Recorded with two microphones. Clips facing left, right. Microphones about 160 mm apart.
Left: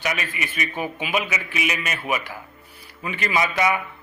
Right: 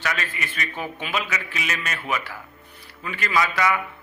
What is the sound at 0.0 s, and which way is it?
A man's voice, 15° left (ahead or behind).